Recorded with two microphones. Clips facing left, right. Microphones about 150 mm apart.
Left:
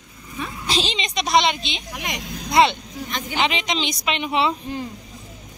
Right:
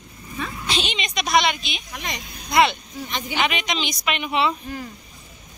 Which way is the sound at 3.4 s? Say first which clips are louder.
Left 2 dB; 25° left (ahead or behind).